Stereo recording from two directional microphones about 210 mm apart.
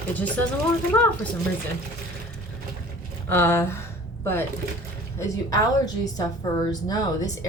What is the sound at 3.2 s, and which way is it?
Speech, 10° left (ahead or behind).